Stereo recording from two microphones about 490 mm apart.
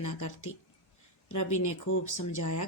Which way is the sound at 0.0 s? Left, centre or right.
Left.